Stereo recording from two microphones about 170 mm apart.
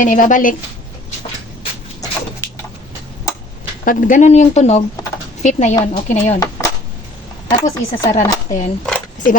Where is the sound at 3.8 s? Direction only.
50° left (ahead or behind).